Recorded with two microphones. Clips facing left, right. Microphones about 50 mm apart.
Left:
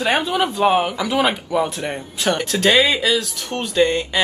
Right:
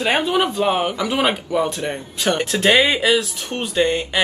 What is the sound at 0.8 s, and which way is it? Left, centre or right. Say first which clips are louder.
Speech: right 1 dB; centre.